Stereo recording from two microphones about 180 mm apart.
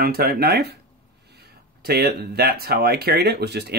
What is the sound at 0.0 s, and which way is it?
Speech, 55° right (ahead or behind).